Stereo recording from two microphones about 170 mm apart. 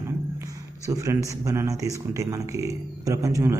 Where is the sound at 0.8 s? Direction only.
20° right (ahead or behind).